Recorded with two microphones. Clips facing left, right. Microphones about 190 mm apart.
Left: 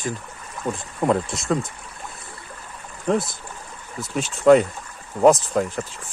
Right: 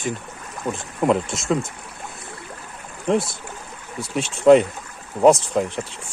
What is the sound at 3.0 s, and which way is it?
Speech, centre (ahead or behind).